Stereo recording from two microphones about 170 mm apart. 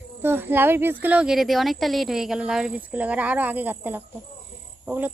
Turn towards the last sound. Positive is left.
turn(degrees=-10)  # may be behind; listen again after turning